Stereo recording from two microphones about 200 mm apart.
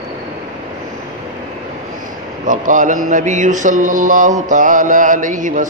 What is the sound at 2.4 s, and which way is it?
Mantra, 40° right (ahead or behind).